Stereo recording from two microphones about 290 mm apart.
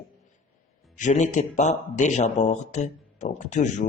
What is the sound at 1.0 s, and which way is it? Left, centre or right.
Speech, left.